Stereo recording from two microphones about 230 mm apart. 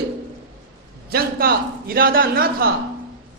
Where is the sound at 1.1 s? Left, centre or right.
Right.